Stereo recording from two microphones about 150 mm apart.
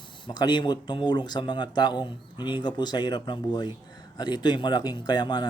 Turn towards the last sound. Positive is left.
turn(degrees=30)  # may be behind; listen again after turning